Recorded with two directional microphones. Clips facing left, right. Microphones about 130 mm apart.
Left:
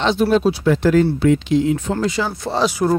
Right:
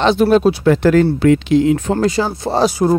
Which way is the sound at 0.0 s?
55° right (ahead or behind).